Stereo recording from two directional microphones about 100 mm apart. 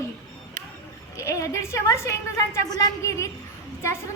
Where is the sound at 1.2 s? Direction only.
30° left (ahead or behind).